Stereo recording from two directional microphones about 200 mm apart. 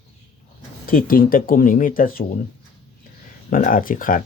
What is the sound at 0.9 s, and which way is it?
Speech, 45° left (ahead or behind).